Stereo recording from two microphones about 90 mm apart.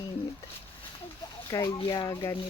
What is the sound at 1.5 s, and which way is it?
Speech, 30° left (ahead or behind).